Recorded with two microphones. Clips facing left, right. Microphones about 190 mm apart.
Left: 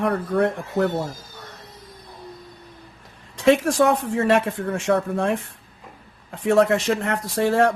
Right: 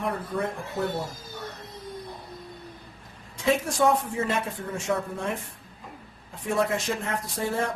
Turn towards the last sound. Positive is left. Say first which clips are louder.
# left 9 dB
turn(degrees=75)  # may be behind; listen again after turning